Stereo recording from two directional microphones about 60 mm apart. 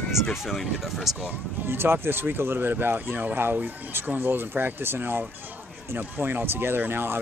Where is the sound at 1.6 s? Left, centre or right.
Right.